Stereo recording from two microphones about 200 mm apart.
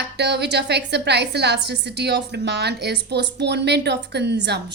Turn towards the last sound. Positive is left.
turn(degrees=-55)  # may be behind; listen again after turning